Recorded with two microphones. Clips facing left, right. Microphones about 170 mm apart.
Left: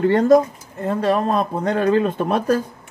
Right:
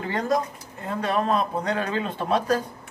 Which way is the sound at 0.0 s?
45° left (ahead or behind).